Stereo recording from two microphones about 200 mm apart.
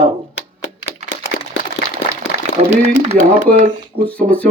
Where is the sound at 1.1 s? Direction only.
65° left (ahead or behind).